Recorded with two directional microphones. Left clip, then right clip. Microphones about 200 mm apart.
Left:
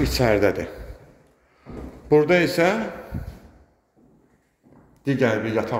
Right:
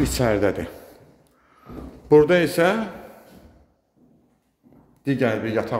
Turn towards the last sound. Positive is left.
turn(degrees=-10)  # may be behind; listen again after turning